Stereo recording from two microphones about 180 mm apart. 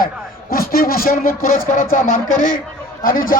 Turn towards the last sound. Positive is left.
turn(degrees=50)  # may be behind; listen again after turning